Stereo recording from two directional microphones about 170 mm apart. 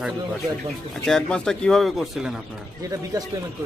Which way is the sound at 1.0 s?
5° left (ahead or behind).